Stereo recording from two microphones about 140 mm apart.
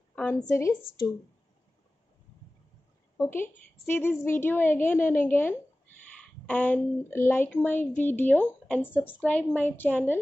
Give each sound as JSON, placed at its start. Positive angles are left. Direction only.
{"t": 0.1, "sound": "a sound", "side_deg": 10}
{"t": 0.6, "sound": "a woman's voice", "side_deg": 25}
{"t": 3.2, "sound": "a woman's voice", "side_deg": 15}